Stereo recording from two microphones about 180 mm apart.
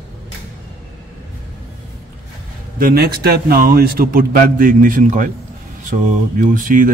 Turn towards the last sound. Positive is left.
turn(degrees=-50)  # may be behind; listen again after turning